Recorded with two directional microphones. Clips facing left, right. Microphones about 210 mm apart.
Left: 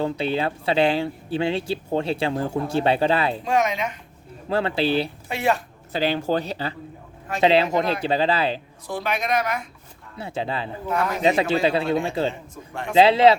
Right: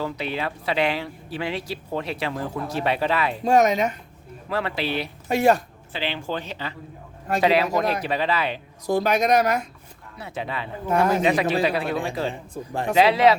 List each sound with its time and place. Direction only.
0.0 s speech: 30° left (ahead or behind)
3.4 s speech: 40° right (ahead or behind)
4.4 s speech: 30° left (ahead or behind)
5.3 s speech: 40° right (ahead or behind)
5.9 s speech: 40° left (ahead or behind)
8.9 s speech: 40° right (ahead or behind)
10.2 s speech: 30° left (ahead or behind)
12.6 s speech: 30° right (ahead or behind)
12.9 s speech: 25° left (ahead or behind)